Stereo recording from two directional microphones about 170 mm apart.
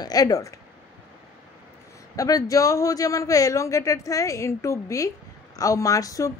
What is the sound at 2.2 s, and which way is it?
A man's voice, 20° left (ahead or behind).